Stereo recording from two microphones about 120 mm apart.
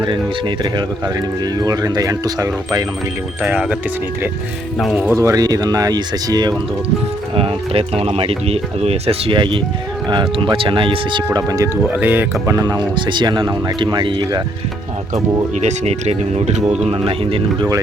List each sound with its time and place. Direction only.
0.0 s speech: 40° right (ahead or behind)
3.4 s speech: 10° right (ahead or behind)
5.1 s speech: 25° right (ahead or behind)
7.3 s speech: 50° right (ahead or behind)
11.3 s speech: 30° right (ahead or behind)
12.5 s speech: 35° right (ahead or behind)
15.6 s speech: 65° right (ahead or behind)
17.1 s speech: 50° right (ahead or behind)